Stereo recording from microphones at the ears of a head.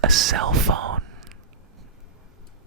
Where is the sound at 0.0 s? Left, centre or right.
Right.